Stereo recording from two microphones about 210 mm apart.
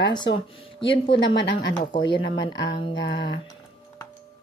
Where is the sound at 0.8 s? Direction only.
25° left (ahead or behind).